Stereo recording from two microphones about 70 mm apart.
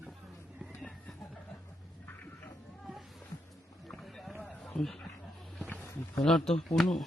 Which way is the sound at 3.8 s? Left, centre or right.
Centre.